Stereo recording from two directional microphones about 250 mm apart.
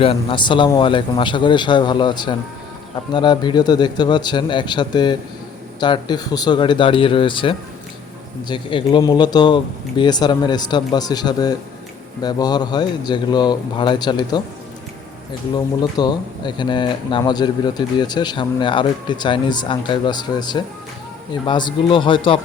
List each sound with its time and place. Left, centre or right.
0.0 s speech: left
15.5 s speech: centre